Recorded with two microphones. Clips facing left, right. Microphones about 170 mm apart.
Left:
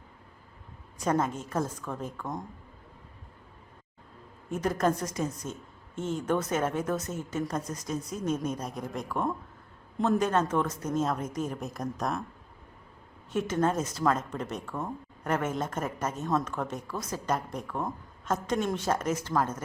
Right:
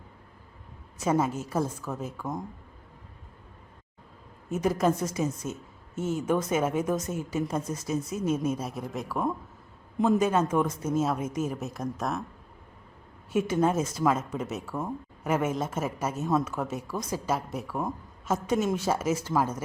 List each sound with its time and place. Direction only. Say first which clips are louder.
0.9 s a woman's voice: right 2 dB; 5° right (ahead or behind)
4.4 s a woman's voice: right 2 dB; 5° right (ahead or behind)
13.3 s a woman's voice: right 3 dB; 10° right (ahead or behind)